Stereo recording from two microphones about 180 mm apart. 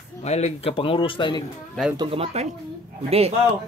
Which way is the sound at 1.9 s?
30° right (ahead or behind).